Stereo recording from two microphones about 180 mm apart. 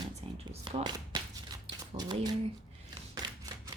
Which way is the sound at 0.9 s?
25° right (ahead or behind).